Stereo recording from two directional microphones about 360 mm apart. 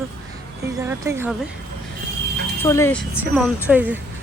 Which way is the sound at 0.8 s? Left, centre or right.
Centre.